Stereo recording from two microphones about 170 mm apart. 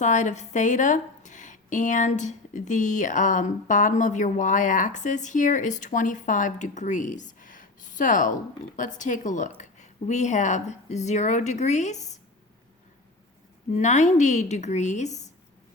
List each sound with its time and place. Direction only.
0.0 s a woman's voice: 45° left (ahead or behind)
13.7 s a woman's voice: 45° left (ahead or behind)